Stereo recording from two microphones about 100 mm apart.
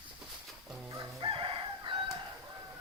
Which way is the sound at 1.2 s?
60° right (ahead or behind).